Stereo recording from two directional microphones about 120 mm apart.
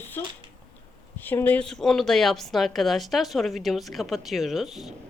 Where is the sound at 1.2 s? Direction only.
15° left (ahead or behind); by 4.9 s centre (ahead or behind).